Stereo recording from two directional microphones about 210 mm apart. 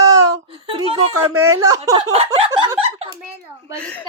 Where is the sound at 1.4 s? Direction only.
90° right.